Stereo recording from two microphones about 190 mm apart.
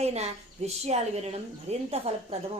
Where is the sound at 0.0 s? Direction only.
35° right (ahead or behind).